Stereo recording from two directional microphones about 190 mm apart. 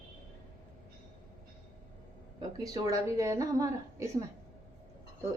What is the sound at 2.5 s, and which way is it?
A woman's voice, 20° right (ahead or behind).